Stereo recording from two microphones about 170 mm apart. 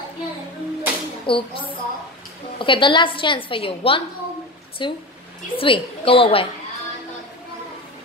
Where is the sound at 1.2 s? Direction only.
30° left (ahead or behind).